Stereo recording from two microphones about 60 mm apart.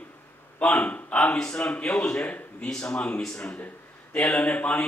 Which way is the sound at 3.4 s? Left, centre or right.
Left.